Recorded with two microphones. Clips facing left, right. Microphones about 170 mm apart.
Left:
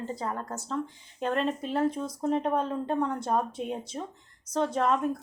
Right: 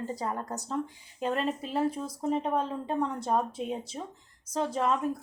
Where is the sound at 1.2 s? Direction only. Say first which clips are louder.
Left 1 dB; 5° right (ahead or behind).